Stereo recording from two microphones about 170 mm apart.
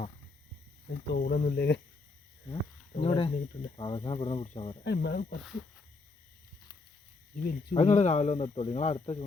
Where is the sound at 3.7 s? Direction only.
30° left (ahead or behind).